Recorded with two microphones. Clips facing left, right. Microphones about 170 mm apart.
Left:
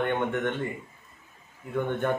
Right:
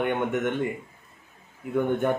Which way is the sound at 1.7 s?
10° right (ahead or behind).